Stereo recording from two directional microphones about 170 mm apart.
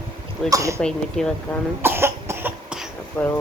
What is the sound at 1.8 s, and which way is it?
Cough, 15° right (ahead or behind).